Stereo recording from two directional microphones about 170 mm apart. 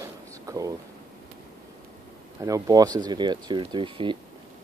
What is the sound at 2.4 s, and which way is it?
Speech, 20° right (ahead or behind).